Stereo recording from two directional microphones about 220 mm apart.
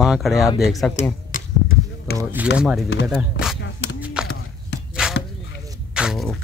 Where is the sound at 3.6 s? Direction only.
50° left (ahead or behind).